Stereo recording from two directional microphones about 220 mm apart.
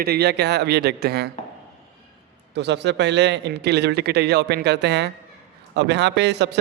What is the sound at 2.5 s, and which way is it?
A man's voice, 50° right (ahead or behind).